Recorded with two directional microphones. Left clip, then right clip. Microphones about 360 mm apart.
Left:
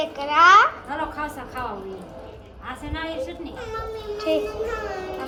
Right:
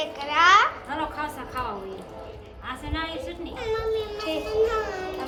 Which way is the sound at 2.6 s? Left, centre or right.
Centre.